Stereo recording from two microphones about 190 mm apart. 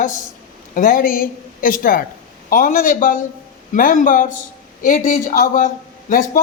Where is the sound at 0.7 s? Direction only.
45° left (ahead or behind).